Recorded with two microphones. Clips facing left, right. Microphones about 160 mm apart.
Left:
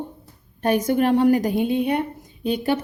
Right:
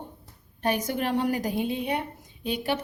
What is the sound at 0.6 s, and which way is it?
A woman's voice, 50° left (ahead or behind).